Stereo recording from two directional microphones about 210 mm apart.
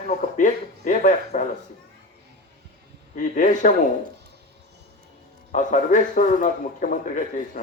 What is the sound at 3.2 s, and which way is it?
Speech, 35° left (ahead or behind).